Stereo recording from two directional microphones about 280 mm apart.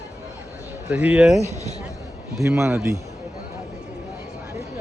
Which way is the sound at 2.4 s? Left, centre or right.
Centre.